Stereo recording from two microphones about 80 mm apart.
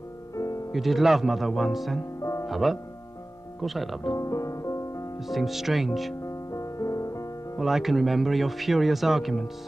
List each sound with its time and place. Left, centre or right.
0.7 s speech: centre
4.1 s music: left
5.3 s speech: centre
6.2 s music: left
7.5 s speech: centre